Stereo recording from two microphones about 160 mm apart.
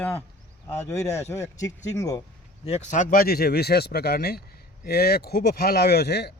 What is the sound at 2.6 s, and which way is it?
Speech, 45° left (ahead or behind).